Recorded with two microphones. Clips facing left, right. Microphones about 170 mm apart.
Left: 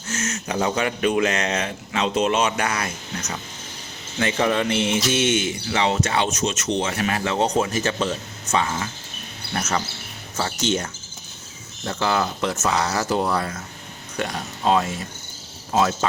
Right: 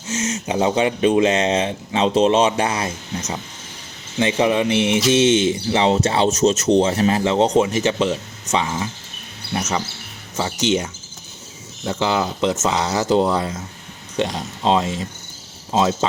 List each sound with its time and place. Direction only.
0.1 s speech: 20° right (ahead or behind)
11.9 s speech: 15° right (ahead or behind)